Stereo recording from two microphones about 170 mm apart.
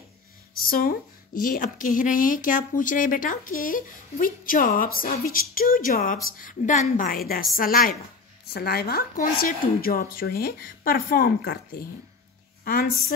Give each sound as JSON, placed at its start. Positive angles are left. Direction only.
{"t": 0.6, "sound": "a woman's voice", "side_deg": 55}